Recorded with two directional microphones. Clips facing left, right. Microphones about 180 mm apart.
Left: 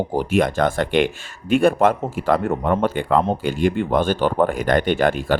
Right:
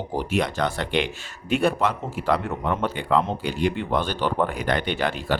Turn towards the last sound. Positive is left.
turn(degrees=50)  # may be behind; listen again after turning